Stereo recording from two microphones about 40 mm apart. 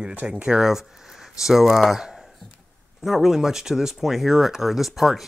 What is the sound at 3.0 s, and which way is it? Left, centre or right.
Speech, centre.